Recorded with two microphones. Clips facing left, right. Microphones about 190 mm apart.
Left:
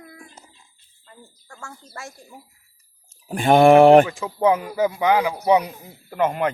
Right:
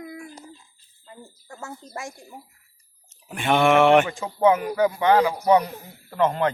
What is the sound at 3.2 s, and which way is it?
Speech, 35° left (ahead or behind).